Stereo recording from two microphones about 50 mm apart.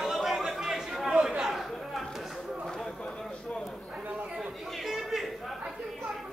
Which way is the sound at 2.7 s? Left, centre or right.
Centre.